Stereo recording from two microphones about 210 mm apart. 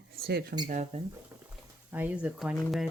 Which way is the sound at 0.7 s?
35° right (ahead or behind).